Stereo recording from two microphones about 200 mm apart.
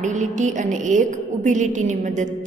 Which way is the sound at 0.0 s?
35° right (ahead or behind).